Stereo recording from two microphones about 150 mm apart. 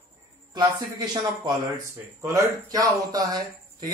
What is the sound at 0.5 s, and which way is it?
A man's voice, 30° right (ahead or behind).